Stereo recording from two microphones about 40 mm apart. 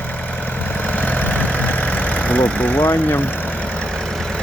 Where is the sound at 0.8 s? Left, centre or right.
Left.